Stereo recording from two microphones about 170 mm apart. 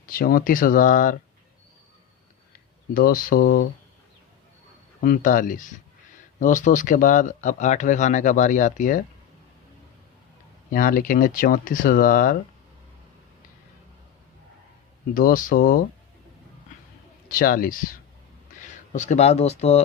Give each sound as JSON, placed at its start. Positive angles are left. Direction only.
{"t": 0.0, "sound": "speech", "side_deg": 55}
{"t": 2.9, "sound": "speech", "side_deg": 55}
{"t": 5.0, "sound": "speech", "side_deg": 55}
{"t": 10.7, "sound": "speech", "side_deg": 55}
{"t": 15.1, "sound": "speech", "side_deg": 55}
{"t": 17.3, "sound": "speech", "side_deg": 60}